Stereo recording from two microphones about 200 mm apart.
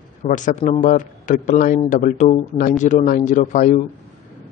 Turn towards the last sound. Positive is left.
turn(degrees=40)  # may be behind; listen again after turning